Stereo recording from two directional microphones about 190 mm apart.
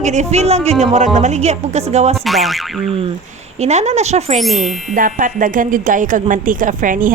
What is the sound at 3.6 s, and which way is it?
Speech, 35° right (ahead or behind).